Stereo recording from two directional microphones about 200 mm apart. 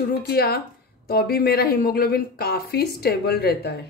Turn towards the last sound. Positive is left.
turn(degrees=55)  # may be behind; listen again after turning